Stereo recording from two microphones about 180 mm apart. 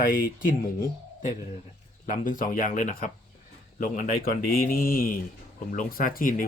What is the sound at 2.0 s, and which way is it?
Speech, 50° left (ahead or behind).